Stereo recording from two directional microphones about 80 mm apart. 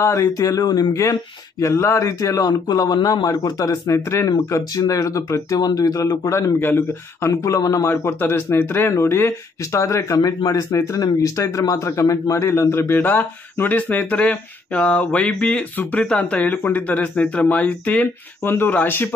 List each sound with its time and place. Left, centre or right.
0.0 s a man's voice: left
1.6 s a man's voice: left
6.3 s a man's voice: left
7.4 s a man's voice: left
10.1 s speech: left